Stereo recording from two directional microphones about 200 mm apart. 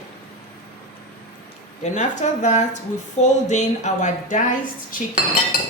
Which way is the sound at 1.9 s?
35° left (ahead or behind).